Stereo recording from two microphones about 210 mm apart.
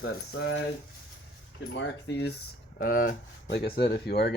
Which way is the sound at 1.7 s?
55° left (ahead or behind).